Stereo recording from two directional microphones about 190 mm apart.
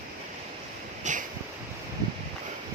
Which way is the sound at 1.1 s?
40° right (ahead or behind).